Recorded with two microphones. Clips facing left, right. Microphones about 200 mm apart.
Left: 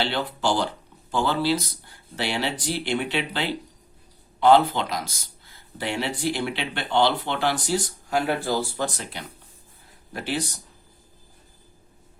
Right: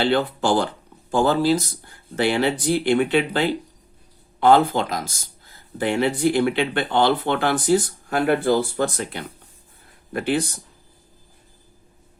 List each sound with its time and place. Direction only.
0.0 s speech: 50° right (ahead or behind)